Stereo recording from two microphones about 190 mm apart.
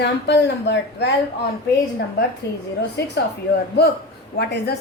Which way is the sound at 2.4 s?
60° left (ahead or behind).